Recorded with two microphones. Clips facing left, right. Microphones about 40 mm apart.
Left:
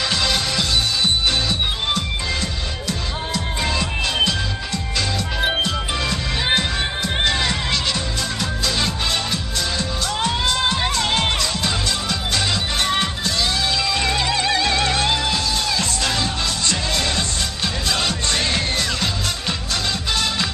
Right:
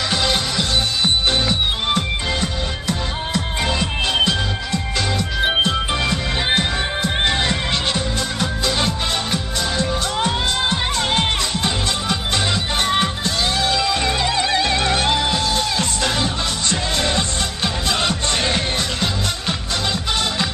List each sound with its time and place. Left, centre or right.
0.1 s music: right
2.0 s music: right
5.6 s music: right
14.0 s music: right